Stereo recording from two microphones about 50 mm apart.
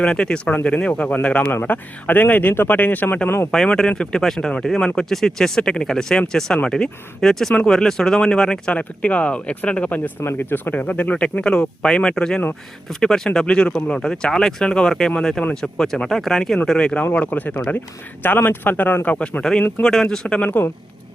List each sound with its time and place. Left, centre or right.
0.0 s speech: centre; by 3.2 s left
3.2 s speech: left
3.8 s speech: centre
8.7 s speech: left
10.3 s speech: left; by 16.6 s centre
16.7 s speech: centre
17.0 s speech: left
19.4 s speech: centre
20.2 s speech: left